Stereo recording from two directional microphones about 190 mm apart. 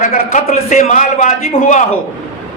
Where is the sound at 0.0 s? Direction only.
40° left (ahead or behind).